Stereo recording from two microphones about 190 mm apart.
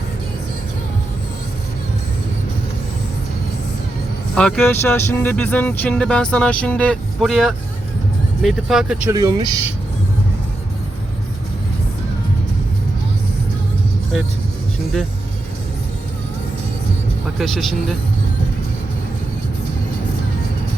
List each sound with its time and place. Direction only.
4.4 s speech: 5° left (ahead or behind)
9.1 s speech: 20° right (ahead or behind)
17.4 s speech: centre (ahead or behind)